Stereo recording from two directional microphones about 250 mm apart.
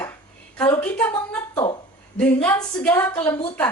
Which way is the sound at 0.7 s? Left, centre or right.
Centre.